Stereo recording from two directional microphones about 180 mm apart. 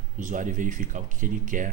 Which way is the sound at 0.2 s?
45° right (ahead or behind).